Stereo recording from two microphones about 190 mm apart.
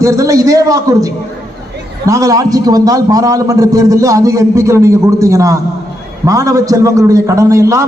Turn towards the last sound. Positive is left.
turn(degrees=-15)  # may be behind; listen again after turning